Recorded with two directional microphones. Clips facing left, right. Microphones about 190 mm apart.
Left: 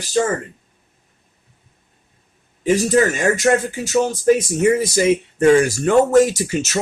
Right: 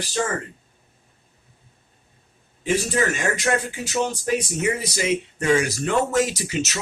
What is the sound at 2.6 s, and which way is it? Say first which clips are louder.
Speech: left 7 dB; 45° left (ahead or behind).